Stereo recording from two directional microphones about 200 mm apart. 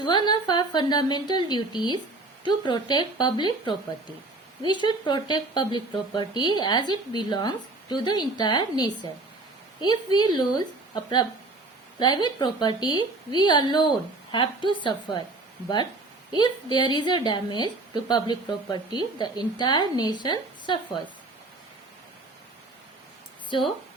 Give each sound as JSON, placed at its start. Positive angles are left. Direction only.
{"t": 0.0, "sound": "speech", "side_deg": 20}
{"t": 11.9, "sound": "speech", "side_deg": 20}
{"t": 16.3, "sound": "speech", "side_deg": 20}
{"t": 23.5, "sound": "speech", "side_deg": 25}